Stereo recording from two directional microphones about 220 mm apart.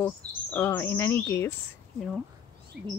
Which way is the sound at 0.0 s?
5° left (ahead or behind).